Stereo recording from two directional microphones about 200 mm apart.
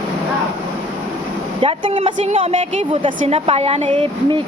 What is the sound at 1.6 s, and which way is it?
Speech, 25° right (ahead or behind).